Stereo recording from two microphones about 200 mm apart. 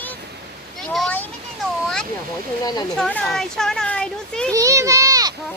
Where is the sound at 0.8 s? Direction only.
Centre (ahead or behind).